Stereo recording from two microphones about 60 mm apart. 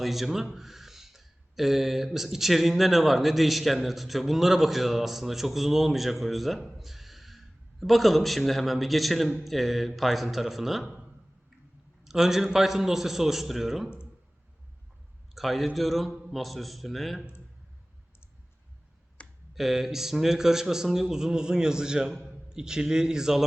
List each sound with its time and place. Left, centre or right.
0.0 s speech: centre
12.0 s speech: centre
15.4 s speech: centre
19.2 s a sound: centre
19.5 s a man's voice: centre